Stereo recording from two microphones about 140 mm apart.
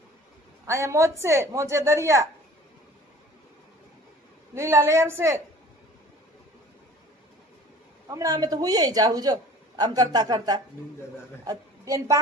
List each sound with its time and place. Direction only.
0.7 s a man's voice: 20° right (ahead or behind)
4.5 s a man's voice: 20° right (ahead or behind)
8.0 s a man's voice: 25° right (ahead or behind)